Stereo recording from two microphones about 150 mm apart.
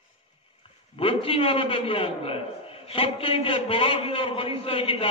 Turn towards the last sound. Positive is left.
turn(degrees=40)  # may be behind; listen again after turning